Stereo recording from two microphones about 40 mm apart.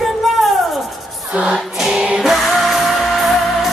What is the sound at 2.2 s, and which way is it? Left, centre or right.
Music, centre.